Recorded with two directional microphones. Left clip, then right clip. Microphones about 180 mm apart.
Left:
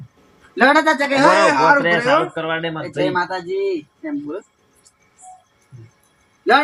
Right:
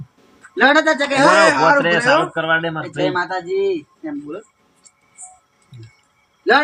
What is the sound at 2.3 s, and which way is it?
Speech, 25° right (ahead or behind).